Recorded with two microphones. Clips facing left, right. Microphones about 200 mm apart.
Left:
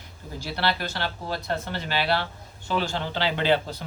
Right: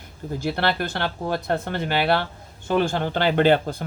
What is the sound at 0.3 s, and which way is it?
Speech, 55° right (ahead or behind).